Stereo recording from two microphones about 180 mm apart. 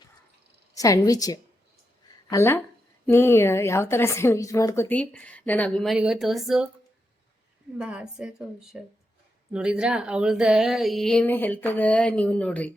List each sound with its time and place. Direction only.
0.7 s a woman's voice: 20° left (ahead or behind); by 6.7 s centre (ahead or behind)
7.8 s speech: 5° right (ahead or behind)